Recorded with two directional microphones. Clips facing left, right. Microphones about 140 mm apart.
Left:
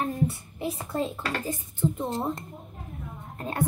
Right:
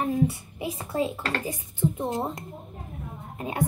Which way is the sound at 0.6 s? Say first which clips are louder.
Right 2 dB; 10° right (ahead or behind).